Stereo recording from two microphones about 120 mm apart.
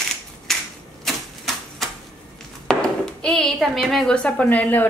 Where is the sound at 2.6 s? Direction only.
5° left (ahead or behind).